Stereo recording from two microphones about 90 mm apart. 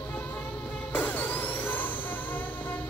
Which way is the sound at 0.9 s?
20° left (ahead or behind).